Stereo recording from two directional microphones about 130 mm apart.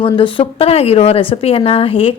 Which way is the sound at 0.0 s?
40° left (ahead or behind).